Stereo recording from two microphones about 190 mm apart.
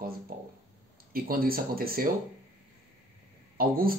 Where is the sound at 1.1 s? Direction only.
50° right (ahead or behind).